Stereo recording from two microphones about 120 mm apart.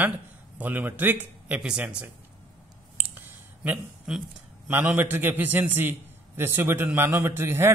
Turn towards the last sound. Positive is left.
turn(degrees=-20)  # may be behind; listen again after turning